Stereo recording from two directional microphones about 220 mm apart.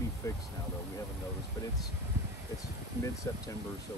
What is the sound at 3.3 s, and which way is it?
Speech, 10° left (ahead or behind).